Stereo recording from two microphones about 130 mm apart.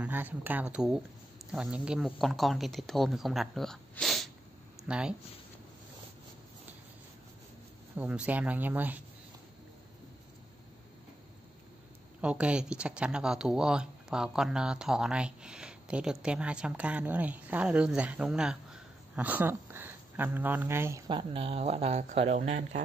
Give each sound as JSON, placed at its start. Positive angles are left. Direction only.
{"t": 0.0, "sound": "speech", "side_deg": -15}
{"t": 7.9, "sound": "speech", "side_deg": -10}
{"t": 12.2, "sound": "speech", "side_deg": -10}
{"t": 21.1, "sound": "speech", "side_deg": -40}